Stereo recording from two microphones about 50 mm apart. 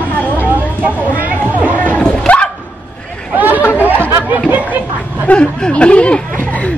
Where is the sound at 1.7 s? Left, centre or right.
Left.